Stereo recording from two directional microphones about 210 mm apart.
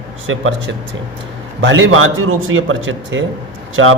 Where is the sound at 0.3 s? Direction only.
70° right (ahead or behind).